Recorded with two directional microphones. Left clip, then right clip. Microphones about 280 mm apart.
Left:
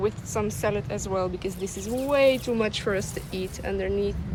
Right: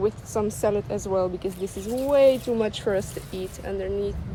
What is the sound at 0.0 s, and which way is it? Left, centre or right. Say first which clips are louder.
Speech: right 2 dB; centre.